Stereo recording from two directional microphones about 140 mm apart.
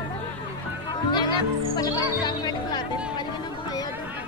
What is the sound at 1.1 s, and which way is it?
Music, 30° left (ahead or behind).